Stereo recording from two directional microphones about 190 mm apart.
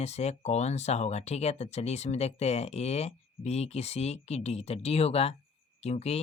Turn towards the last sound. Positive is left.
turn(degrees=35)  # may be behind; listen again after turning